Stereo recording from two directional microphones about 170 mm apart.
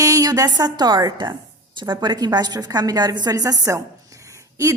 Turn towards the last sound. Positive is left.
turn(degrees=-15)  # may be behind; listen again after turning